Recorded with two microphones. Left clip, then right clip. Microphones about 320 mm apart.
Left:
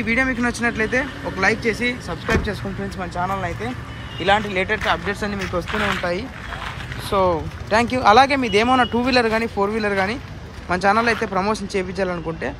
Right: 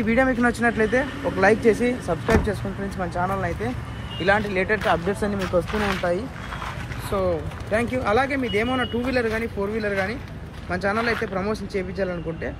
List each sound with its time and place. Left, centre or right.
0.0 s speech: centre